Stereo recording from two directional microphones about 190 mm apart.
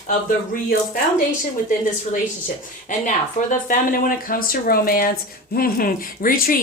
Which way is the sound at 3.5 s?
45° left (ahead or behind).